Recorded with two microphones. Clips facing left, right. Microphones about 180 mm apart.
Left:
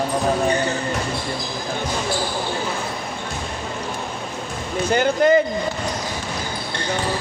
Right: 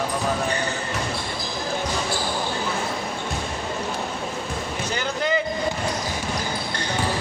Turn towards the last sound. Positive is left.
turn(degrees=55)  # may be behind; listen again after turning